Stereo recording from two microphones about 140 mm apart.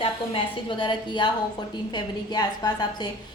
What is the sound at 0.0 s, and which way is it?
A woman's voice, 35° left (ahead or behind).